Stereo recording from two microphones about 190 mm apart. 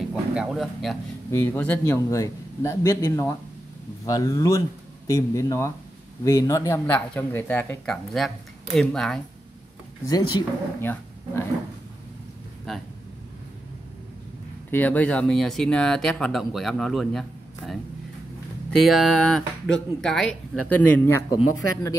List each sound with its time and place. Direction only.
0.1 s speech: 5° right (ahead or behind)
1.3 s speech: 10° left (ahead or behind)
10.0 s speech: 20° left (ahead or behind)
14.7 s speech: 10° left (ahead or behind)